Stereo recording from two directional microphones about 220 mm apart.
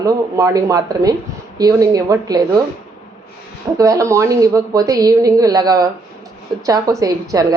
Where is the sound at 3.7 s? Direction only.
15° right (ahead or behind).